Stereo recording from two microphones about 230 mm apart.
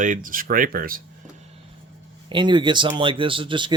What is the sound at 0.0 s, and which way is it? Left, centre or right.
Speech, right.